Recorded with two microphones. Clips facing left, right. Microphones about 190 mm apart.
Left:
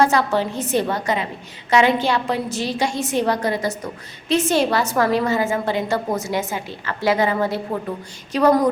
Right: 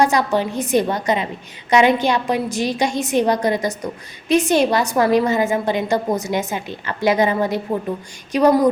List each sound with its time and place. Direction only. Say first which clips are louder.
0.0 s a woman's voice: right 1 dB; 15° right (ahead or behind)